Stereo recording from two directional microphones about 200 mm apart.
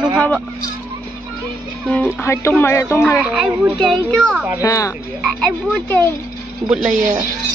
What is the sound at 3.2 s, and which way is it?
A man's voice, 5° right (ahead or behind).